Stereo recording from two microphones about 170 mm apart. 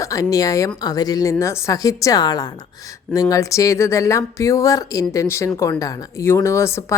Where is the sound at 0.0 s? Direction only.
20° left (ahead or behind).